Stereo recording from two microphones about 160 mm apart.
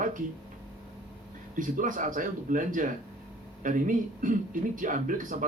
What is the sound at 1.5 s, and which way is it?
Speech, 55° right (ahead or behind).